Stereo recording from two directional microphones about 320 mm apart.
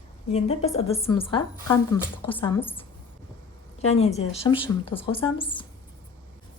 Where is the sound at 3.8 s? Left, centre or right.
Centre.